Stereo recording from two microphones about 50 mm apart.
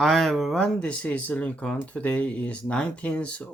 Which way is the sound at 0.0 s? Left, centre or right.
Centre.